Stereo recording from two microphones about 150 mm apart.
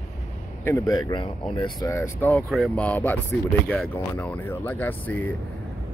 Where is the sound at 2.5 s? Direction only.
Centre (ahead or behind).